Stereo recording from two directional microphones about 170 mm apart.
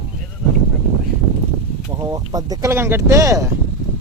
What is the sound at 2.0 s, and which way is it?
Speech, 20° right (ahead or behind).